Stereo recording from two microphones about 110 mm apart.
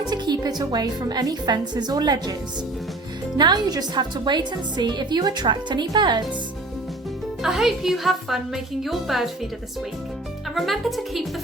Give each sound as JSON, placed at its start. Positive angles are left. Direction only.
{"t": 0.1, "sound": "music", "side_deg": -40}
{"t": 0.6, "sound": "a woman's voice", "side_deg": -40}
{"t": 3.3, "sound": "a woman's voice", "side_deg": -40}
{"t": 7.4, "sound": "a woman's voice", "side_deg": 0}
{"t": 10.5, "sound": "a woman's voice", "side_deg": 0}